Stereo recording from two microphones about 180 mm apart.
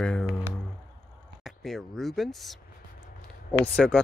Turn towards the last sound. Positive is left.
turn(degrees=5)  # may be behind; listen again after turning